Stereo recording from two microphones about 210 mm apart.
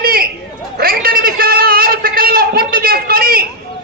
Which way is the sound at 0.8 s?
45° right (ahead or behind).